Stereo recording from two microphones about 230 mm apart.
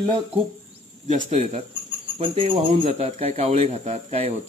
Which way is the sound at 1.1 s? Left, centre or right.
Right.